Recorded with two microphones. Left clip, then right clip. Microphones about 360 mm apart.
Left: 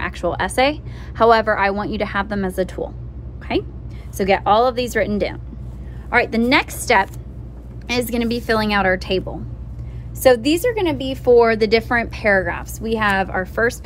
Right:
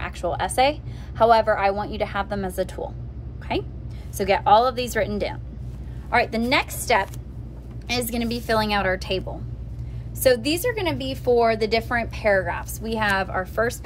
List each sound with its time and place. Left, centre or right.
0.0 s a woman's voice: left
10.2 s a woman's voice: centre